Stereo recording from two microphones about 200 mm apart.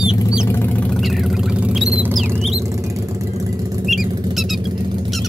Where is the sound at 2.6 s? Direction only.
15° right (ahead or behind).